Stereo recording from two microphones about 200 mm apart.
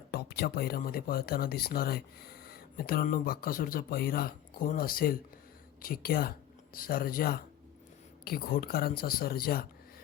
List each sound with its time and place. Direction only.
0.1 s speech: 50° left (ahead or behind)